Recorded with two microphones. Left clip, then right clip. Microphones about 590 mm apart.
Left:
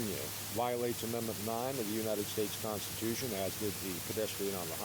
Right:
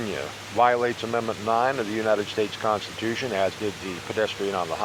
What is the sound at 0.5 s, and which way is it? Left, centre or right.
Speech, left.